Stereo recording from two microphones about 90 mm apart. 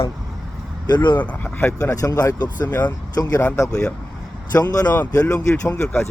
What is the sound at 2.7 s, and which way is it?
Speech, 20° left (ahead or behind).